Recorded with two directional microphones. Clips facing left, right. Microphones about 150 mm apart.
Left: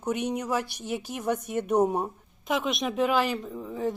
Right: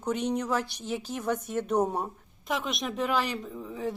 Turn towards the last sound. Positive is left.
turn(degrees=0)  # may be behind; listen again after turning